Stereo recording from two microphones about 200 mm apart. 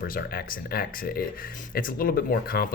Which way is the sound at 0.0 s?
45° left (ahead or behind).